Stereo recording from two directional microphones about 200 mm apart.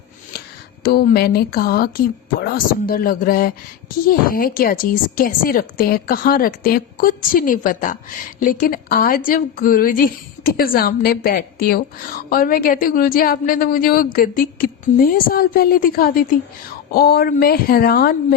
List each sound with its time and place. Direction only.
0.3 s a woman's voice: 50° left (ahead or behind)